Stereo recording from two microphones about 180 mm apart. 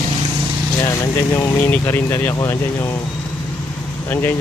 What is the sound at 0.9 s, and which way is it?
Speech, 20° left (ahead or behind).